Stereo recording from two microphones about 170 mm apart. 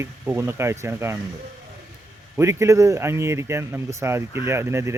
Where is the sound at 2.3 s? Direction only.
15° right (ahead or behind).